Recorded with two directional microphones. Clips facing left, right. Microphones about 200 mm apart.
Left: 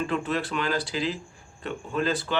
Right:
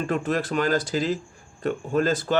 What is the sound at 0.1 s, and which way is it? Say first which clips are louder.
Speech: right 3 dB; 45° right (ahead or behind).